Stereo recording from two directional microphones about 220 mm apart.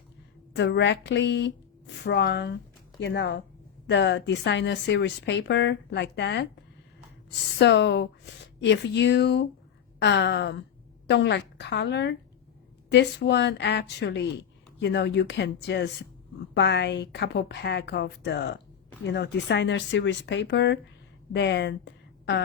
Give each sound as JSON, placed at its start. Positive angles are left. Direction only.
{"t": 0.5, "sound": "a woman's voice", "side_deg": 55}